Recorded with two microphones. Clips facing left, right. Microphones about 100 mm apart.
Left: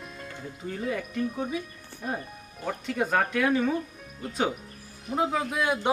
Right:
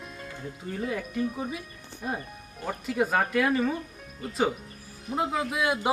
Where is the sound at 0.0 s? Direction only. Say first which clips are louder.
Right 1 dB; centre (ahead or behind).